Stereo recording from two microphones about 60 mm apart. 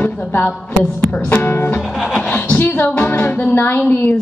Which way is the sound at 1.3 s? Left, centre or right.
Left.